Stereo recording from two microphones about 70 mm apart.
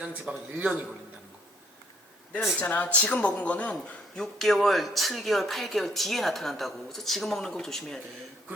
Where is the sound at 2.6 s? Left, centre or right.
Left.